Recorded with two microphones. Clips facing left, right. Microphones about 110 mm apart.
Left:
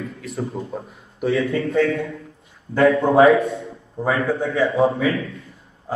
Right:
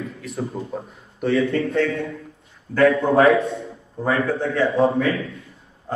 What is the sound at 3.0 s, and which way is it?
Speech, 30° left (ahead or behind).